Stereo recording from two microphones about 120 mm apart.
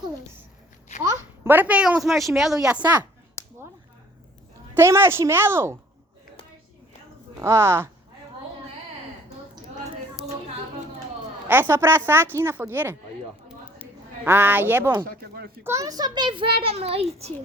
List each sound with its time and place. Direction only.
1.5 s speech: 15° right (ahead or behind)
3.4 s finger snapping: 20° left (ahead or behind)
4.7 s speech: 20° right (ahead or behind)
7.4 s speech: 20° right (ahead or behind)
11.4 s speech: 15° right (ahead or behind)
14.3 s a child's voice: 15° right (ahead or behind); by 17.3 s 60° right (ahead or behind)